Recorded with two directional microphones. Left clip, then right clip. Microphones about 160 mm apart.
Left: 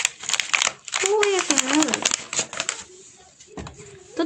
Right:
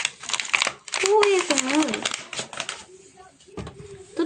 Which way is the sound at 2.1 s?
85° left.